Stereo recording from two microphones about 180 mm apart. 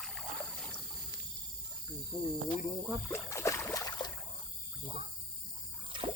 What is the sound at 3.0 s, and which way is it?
Boat, 15° left (ahead or behind).